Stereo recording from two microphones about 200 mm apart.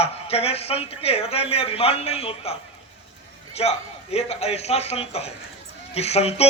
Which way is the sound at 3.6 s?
30° left (ahead or behind).